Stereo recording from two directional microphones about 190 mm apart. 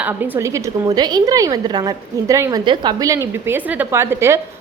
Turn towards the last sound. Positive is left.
turn(degrees=-15)  # may be behind; listen again after turning